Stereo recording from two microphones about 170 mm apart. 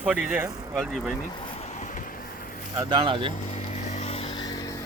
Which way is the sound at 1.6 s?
45° left (ahead or behind).